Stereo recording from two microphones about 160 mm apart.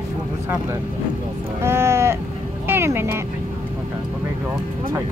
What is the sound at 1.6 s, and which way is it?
Cattle, 15° right (ahead or behind).